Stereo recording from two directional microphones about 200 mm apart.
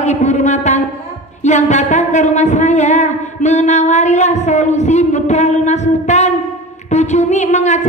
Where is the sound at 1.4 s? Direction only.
35° left (ahead or behind).